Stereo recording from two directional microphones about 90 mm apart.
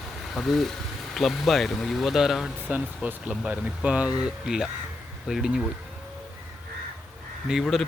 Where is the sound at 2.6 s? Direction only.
15° right (ahead or behind).